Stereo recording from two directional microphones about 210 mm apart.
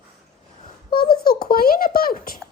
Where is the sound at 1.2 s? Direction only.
45° left (ahead or behind).